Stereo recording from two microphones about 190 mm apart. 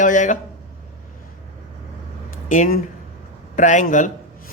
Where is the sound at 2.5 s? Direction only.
40° left (ahead or behind).